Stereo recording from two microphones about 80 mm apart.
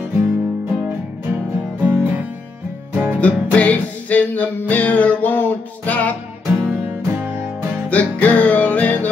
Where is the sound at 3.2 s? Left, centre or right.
Centre.